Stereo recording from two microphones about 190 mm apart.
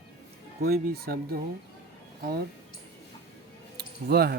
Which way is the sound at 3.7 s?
55° right (ahead or behind).